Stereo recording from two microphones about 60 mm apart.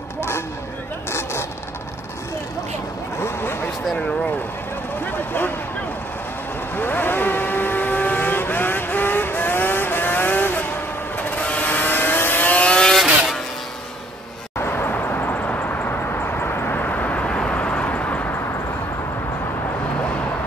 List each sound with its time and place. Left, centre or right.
3.2 s a sound: left
5.0 s speech: left
6.8 s vehicle: left
12.9 s vehicle: centre
14.6 s vehicle: left
18.3 s vehicle: left